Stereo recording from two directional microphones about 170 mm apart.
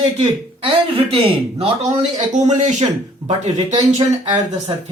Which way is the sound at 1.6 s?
35° right (ahead or behind).